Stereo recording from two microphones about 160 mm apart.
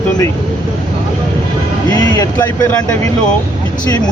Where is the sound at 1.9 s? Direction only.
20° left (ahead or behind).